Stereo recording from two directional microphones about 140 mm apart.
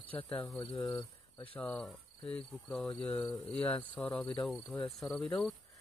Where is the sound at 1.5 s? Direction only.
10° left (ahead or behind).